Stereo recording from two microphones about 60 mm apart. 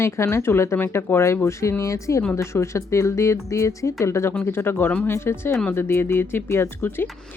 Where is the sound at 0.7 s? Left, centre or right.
Left.